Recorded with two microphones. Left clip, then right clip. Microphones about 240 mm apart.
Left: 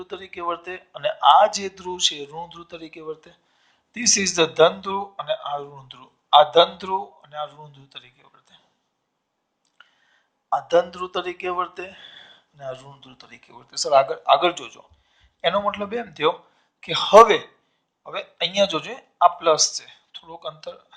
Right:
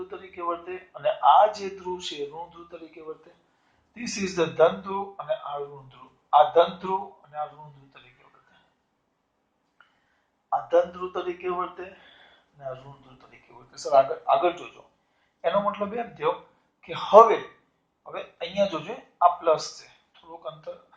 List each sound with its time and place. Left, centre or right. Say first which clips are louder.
0.0 s speech: left 3 dB; left
10.7 s speech: left 3 dB; left